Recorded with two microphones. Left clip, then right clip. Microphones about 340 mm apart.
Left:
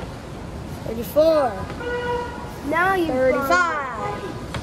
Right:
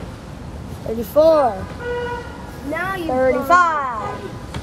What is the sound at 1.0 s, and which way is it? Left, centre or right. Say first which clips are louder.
Speech: right 4 dB; centre.